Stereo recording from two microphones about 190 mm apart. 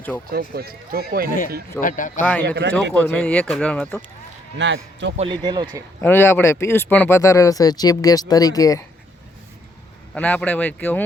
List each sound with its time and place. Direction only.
0.3 s speech: 55° right (ahead or behind)
1.8 s speech: 45° left (ahead or behind)
2.6 s a man's voice: 70° right (ahead or behind)
3.0 s speech: 5° left (ahead or behind)
4.5 s a man's voice: 70° right (ahead or behind)
5.1 s speech: 25° right (ahead or behind)
6.0 s speech: 10° left (ahead or behind)
10.2 s speech: 5° left (ahead or behind)